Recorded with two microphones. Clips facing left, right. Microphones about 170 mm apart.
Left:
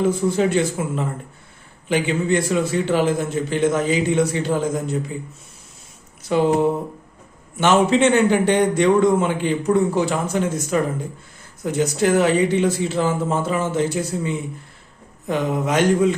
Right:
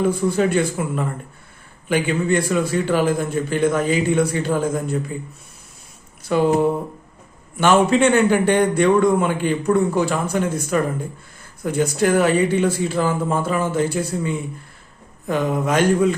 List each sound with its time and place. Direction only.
0.2 s a man's voice: 20° left (ahead or behind)
6.3 s a man's voice: 20° left (ahead or behind)
7.5 s a man's voice: 20° left (ahead or behind)
15.3 s a man's voice: 20° left (ahead or behind)